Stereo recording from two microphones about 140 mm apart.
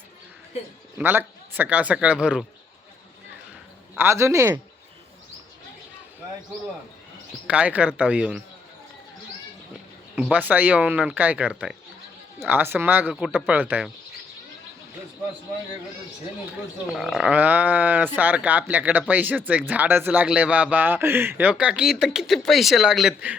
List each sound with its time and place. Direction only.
0.9 s speech: 15° right (ahead or behind)
3.9 s speech: 20° right (ahead or behind)
7.4 s speech: 10° right (ahead or behind)
10.2 s speech: 10° right (ahead or behind)
16.9 s speech: 5° right (ahead or behind)